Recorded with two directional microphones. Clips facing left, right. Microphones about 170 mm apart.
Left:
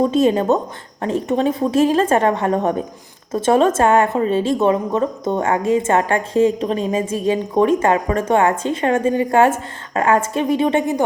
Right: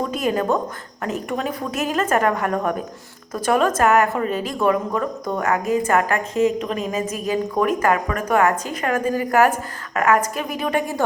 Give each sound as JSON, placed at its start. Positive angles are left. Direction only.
{"t": 0.0, "sound": "a woman's voice", "side_deg": 25}